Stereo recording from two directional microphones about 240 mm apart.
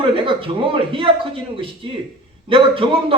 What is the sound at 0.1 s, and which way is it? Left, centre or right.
A man's voice, right.